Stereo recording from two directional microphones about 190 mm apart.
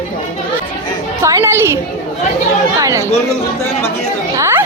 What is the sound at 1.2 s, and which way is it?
Chatter, 15° right (ahead or behind).